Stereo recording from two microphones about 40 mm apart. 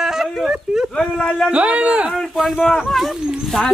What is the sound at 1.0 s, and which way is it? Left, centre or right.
Speech, left.